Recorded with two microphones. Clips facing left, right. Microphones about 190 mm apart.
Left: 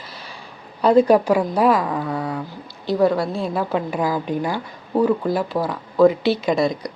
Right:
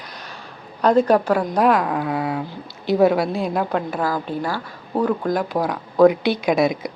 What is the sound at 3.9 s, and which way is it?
Speech, 10° left (ahead or behind).